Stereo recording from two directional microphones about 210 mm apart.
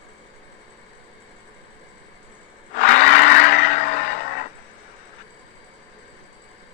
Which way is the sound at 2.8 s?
40° left (ahead or behind).